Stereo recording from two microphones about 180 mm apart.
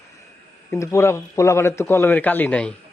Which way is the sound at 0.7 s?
15° left (ahead or behind).